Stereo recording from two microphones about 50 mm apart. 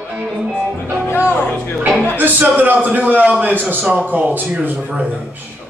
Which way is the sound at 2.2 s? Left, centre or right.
Right.